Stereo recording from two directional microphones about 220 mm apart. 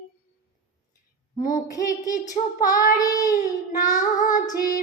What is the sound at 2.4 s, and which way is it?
Female singing, 35° left (ahead or behind).